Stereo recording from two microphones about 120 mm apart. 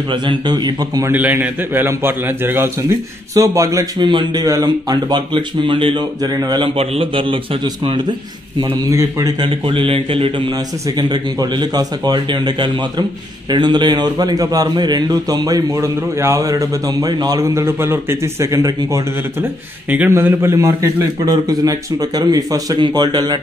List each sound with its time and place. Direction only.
0.1 s a man's voice: 40° right (ahead or behind)
1.0 s a man's voice: 15° right (ahead or behind)
4.0 s a man's voice: 40° right (ahead or behind)
6.8 s a man's voice: 50° right (ahead or behind)
9.4 s a man's voice: 45° right (ahead or behind)
11.0 s a man's voice: 35° right (ahead or behind)
20.1 s a man's voice: 20° right (ahead or behind)